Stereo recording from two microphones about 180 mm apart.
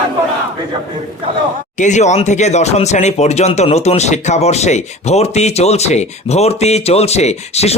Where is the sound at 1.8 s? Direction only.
40° left (ahead or behind).